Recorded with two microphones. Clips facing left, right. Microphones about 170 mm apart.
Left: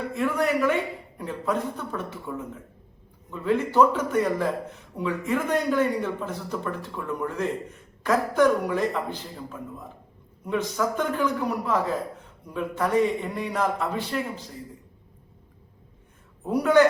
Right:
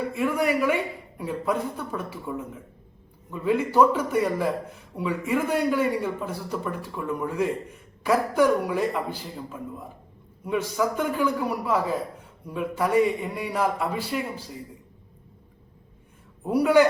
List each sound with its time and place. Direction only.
0.1 s a man's voice: 10° right (ahead or behind)
16.4 s a man's voice: 10° right (ahead or behind)